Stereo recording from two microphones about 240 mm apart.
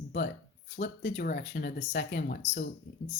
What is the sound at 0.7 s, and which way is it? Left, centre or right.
Speech, left.